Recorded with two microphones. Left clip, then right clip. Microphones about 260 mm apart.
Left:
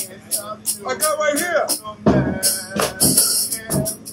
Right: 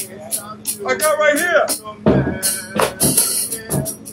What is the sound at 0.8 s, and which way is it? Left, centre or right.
Speech, centre.